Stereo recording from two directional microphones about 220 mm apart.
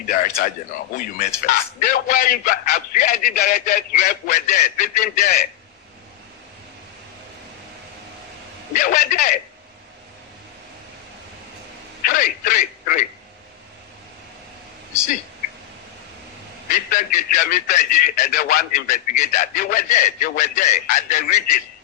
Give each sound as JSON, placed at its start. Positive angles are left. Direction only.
{"t": 0.1, "sound": "a man's voice", "side_deg": 40}
{"t": 8.7, "sound": "a man's voice", "side_deg": 35}
{"t": 12.0, "sound": "speech", "side_deg": 40}
{"t": 16.7, "sound": "a man's voice", "side_deg": 40}